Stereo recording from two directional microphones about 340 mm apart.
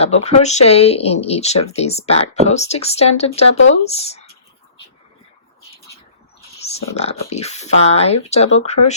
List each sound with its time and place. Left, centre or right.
0.0 s speech: centre
6.7 s speech: centre